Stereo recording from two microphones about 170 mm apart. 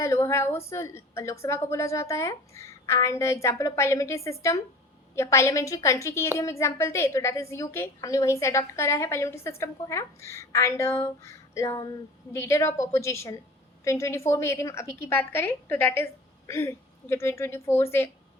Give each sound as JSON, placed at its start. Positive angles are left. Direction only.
{"t": 0.0, "sound": "a woman's voice", "side_deg": 15}